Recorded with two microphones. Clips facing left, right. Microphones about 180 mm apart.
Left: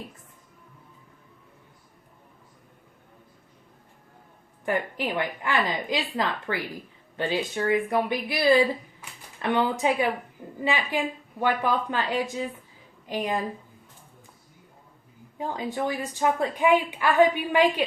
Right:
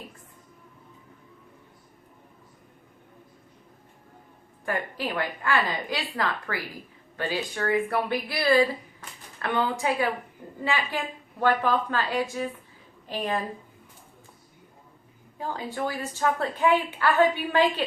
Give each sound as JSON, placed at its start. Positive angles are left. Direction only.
{"t": 4.6, "sound": "a woman's voice", "side_deg": 20}
{"t": 15.4, "sound": "speech", "side_deg": 20}